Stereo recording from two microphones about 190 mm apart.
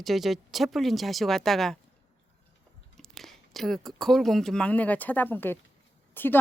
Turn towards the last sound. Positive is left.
turn(degrees=10)  # may be behind; listen again after turning